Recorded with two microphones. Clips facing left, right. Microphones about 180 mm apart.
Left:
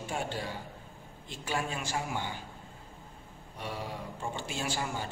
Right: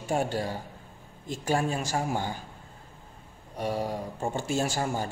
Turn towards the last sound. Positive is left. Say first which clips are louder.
# right 6 dB
turn(degrees=-45)  # may be behind; listen again after turning